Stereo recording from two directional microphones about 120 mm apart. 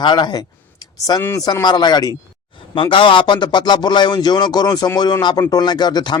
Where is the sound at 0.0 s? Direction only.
40° left (ahead or behind).